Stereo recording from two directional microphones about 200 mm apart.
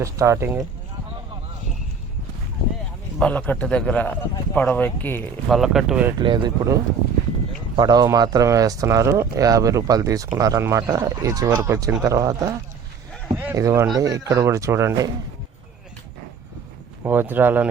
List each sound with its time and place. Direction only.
0.0 s speech: 15° right (ahead or behind)
3.2 s a man's voice: 5° left (ahead or behind)
5.5 s speech: centre (ahead or behind)
6.1 s speech: 25° right (ahead or behind)
7.8 s speech: 20° right (ahead or behind)
17.0 s speech: 10° right (ahead or behind)